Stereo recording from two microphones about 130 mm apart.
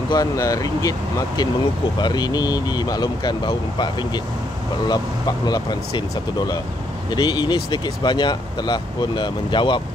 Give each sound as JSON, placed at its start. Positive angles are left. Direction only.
{"t": 0.1, "sound": "speech", "side_deg": 30}